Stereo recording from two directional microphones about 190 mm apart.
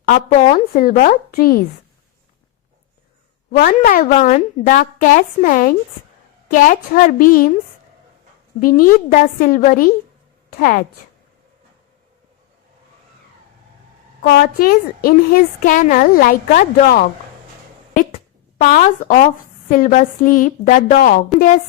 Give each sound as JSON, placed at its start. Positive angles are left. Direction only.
{"t": 0.7, "sound": "a woman's voice", "side_deg": 45}
{"t": 3.5, "sound": "a woman's voice", "side_deg": 50}
{"t": 8.6, "sound": "a woman's voice", "side_deg": 45}
{"t": 14.3, "sound": "a woman's voice", "side_deg": 55}